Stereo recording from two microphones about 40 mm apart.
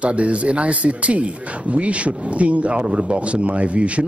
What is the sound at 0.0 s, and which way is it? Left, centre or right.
Speech, right.